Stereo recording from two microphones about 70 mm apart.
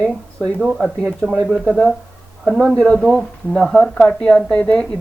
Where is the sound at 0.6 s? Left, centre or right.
Centre.